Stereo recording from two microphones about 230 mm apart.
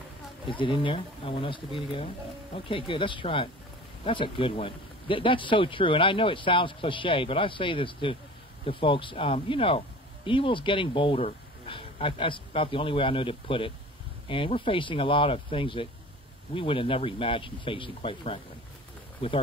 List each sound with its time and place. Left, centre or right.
0.5 s speech: left